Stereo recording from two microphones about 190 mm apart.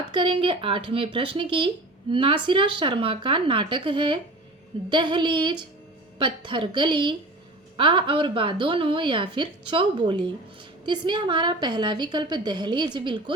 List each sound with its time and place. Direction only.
0.1 s speech: 25° right (ahead or behind)